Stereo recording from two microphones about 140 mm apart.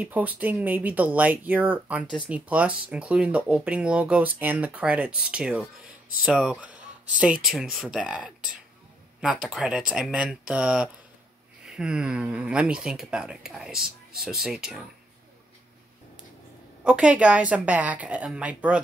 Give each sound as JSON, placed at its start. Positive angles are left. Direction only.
{"t": 0.0, "sound": "speech", "side_deg": -10}
{"t": 16.8, "sound": "speech", "side_deg": -5}